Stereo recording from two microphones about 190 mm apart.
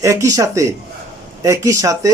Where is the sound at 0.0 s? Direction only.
15° right (ahead or behind).